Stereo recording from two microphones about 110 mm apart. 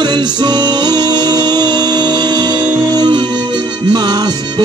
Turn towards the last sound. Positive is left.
turn(degrees=-40)  # may be behind; listen again after turning